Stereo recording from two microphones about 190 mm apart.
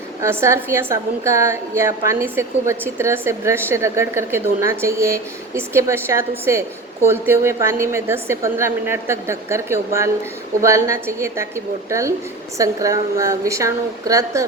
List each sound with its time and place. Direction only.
0.2 s a woman's voice: 15° right (ahead or behind)